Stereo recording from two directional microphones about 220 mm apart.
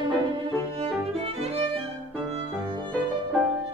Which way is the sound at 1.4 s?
25° right (ahead or behind).